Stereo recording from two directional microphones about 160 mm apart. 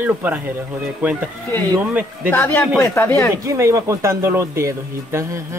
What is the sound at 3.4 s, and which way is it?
Speech, 20° right (ahead or behind).